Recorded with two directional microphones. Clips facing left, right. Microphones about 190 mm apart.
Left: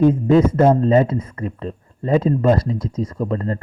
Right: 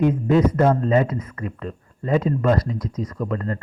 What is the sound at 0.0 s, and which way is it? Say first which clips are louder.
Speech: left 4 dB; 30° left (ahead or behind).